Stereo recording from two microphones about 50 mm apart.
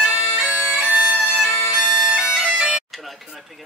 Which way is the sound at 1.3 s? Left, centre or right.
Centre.